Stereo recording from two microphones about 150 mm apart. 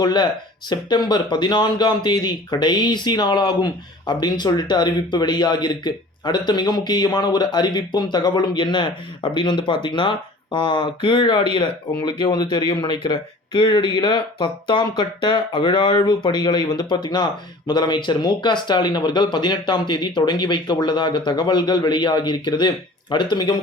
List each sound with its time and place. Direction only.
0.0 s speech: 30° left (ahead or behind)